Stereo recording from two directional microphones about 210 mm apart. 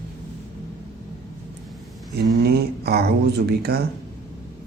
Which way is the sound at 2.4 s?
50° right (ahead or behind).